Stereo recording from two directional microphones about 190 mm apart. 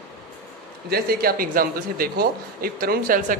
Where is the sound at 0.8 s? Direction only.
55° right (ahead or behind).